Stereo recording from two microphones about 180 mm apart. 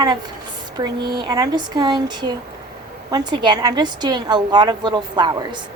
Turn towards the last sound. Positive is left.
turn(degrees=-25)  # may be behind; listen again after turning